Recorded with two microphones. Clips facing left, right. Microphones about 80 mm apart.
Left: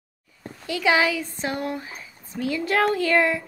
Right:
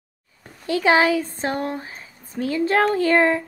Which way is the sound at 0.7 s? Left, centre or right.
Right.